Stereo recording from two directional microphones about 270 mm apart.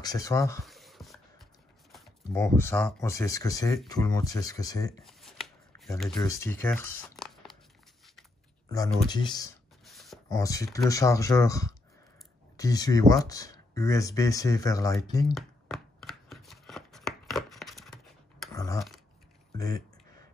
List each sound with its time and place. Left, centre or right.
0.0 s speech: centre
0.7 s writing: centre
2.3 s speech: centre
5.0 s shuffling cards: centre
6.0 s speech: centre
8.6 s speech: centre
9.8 s a sound: centre
10.3 s speech: centre
15.3 s chopping: centre
18.5 s a sound: centre